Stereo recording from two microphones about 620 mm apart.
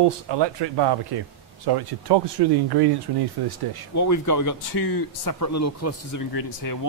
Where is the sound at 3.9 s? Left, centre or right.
Left.